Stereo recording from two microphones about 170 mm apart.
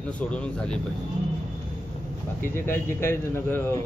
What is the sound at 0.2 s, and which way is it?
Speech, 5° left (ahead or behind).